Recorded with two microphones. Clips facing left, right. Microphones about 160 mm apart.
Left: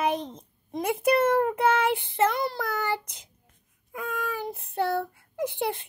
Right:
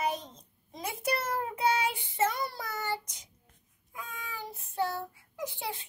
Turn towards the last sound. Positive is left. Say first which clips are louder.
# left 9 dB
turn(degrees=55)  # may be behind; listen again after turning